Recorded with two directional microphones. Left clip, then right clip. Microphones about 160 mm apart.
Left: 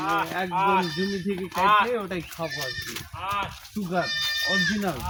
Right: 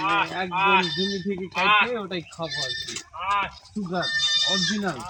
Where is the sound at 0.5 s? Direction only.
55° left (ahead or behind).